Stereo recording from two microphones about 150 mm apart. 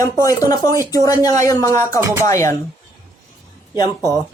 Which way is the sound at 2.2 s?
20° left (ahead or behind).